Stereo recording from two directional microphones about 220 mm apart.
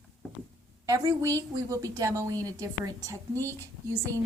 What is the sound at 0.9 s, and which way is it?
A woman's voice, 15° right (ahead or behind).